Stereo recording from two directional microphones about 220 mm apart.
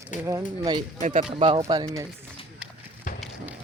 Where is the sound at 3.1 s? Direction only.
35° left (ahead or behind).